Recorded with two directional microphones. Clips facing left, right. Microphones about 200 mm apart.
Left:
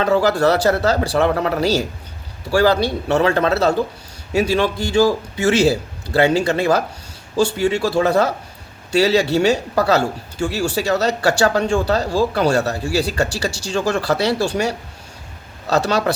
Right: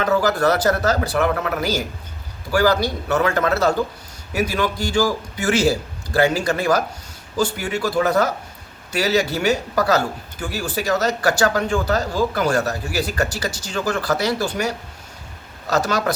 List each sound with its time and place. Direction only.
0.0 s a man's voice: 30° left (ahead or behind)
13.5 s speech: 70° left (ahead or behind)
13.7 s a man's voice: 25° left (ahead or behind)
15.9 s a man's voice: 30° left (ahead or behind)